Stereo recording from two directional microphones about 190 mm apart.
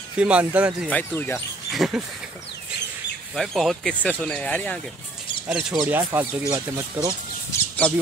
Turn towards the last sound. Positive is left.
turn(degrees=5)  # may be behind; listen again after turning